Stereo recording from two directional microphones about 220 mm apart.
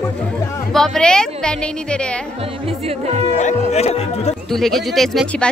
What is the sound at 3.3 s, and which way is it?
Speech, 30° left (ahead or behind).